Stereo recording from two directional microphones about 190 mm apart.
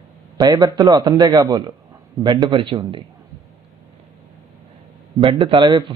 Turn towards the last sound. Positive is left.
turn(degrees=-25)  # may be behind; listen again after turning